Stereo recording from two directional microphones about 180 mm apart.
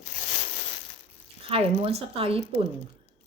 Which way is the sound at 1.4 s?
30° right (ahead or behind).